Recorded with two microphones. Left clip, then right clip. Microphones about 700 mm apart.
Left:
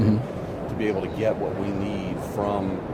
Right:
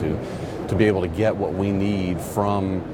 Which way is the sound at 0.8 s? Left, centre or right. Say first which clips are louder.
Right 6 dB; right.